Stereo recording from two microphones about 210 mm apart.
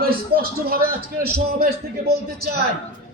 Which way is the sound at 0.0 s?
45° right (ahead or behind).